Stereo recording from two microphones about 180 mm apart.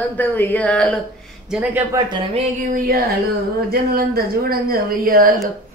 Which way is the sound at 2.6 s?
50° right (ahead or behind).